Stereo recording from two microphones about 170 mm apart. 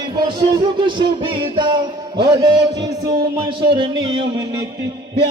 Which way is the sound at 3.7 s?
30° right (ahead or behind).